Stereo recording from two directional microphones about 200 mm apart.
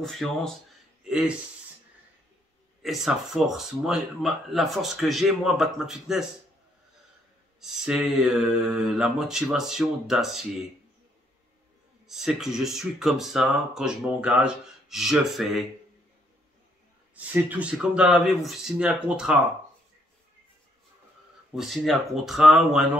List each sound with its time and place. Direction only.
0.0 s speech: centre (ahead or behind)
1.0 s a sound: 5° right (ahead or behind)
2.8 s speech: centre (ahead or behind)
7.6 s speech: 5° right (ahead or behind)
12.1 s speech: centre (ahead or behind)
17.1 s speech: 10° right (ahead or behind)
21.5 s speech: centre (ahead or behind)